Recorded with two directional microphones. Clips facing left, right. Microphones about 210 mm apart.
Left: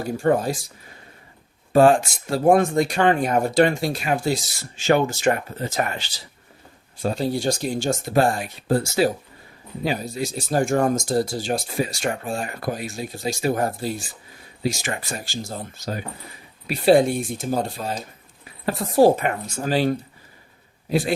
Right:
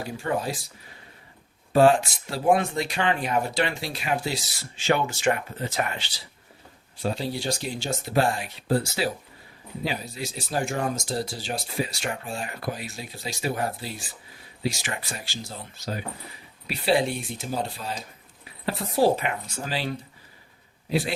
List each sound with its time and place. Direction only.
0.0 s speech: 45° left (ahead or behind)
1.7 s speech: 45° left (ahead or behind)